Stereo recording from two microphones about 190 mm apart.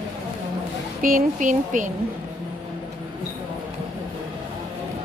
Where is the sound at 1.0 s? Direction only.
45° right (ahead or behind).